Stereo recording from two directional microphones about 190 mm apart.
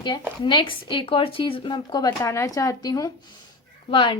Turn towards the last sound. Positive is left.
turn(degrees=25)  # may be behind; listen again after turning